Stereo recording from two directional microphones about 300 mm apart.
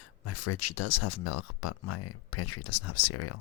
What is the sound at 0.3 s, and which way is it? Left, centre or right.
Speech, left.